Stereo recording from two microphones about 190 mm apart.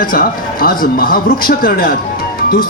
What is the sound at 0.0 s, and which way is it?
A man's voice, 50° left (ahead or behind).